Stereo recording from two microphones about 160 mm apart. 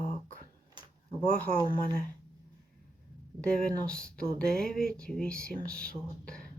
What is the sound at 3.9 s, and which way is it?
Speech, 5° left (ahead or behind).